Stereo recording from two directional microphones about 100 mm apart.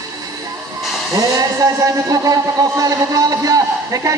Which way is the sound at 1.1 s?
35° right (ahead or behind).